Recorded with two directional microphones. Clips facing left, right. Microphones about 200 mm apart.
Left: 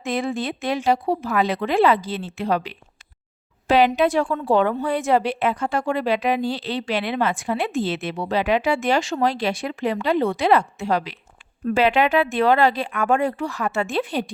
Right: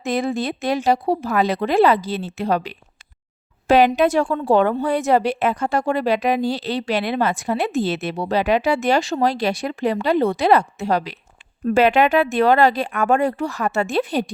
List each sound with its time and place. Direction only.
0.0 s a woman's voice: 40° right (ahead or behind)